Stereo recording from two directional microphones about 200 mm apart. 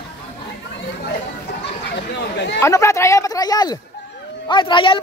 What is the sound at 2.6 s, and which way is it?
A man's voice, 15° left (ahead or behind).